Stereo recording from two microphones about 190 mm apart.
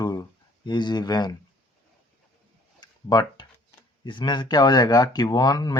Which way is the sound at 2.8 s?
20° left (ahead or behind).